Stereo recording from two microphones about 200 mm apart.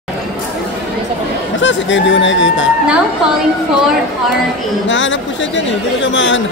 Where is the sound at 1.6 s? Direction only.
65° left (ahead or behind).